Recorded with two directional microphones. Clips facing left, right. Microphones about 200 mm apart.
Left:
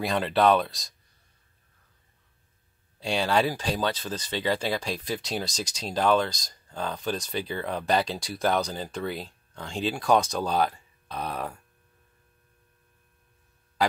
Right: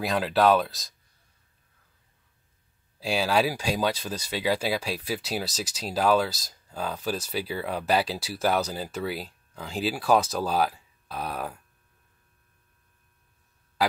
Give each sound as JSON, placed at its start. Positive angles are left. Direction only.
{"t": 0.0, "sound": "speech", "side_deg": 0}
{"t": 3.0, "sound": "speech", "side_deg": -5}